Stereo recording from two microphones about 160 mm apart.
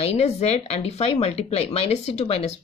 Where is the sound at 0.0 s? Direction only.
40° left (ahead or behind).